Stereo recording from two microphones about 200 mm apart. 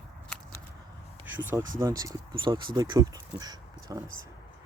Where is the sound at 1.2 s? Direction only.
10° right (ahead or behind).